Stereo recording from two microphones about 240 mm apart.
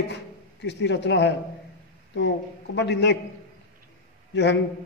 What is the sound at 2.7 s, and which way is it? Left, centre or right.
Speech, left.